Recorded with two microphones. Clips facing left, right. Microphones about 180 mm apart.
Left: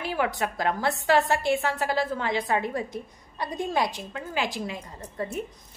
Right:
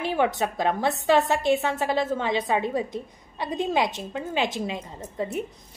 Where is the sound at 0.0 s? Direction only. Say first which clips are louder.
Right 3 dB; 25° right (ahead or behind).